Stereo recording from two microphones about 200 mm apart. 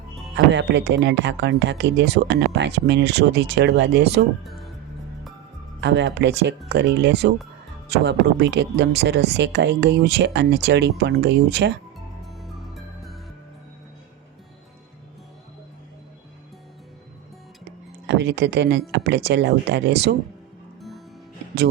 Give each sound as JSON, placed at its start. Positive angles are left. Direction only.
{"t": 0.3, "sound": "speech", "side_deg": -60}
{"t": 4.4, "sound": "music", "side_deg": 0}
{"t": 5.8, "sound": "speech", "side_deg": -60}
{"t": 12.2, "sound": "music", "side_deg": 0}
{"t": 18.0, "sound": "speech", "side_deg": -60}